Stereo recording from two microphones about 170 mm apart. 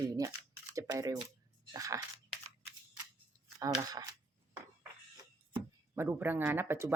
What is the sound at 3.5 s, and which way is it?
Speech, 20° right (ahead or behind).